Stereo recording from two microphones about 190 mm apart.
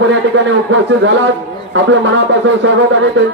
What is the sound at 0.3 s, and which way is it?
Speech, 70° right (ahead or behind).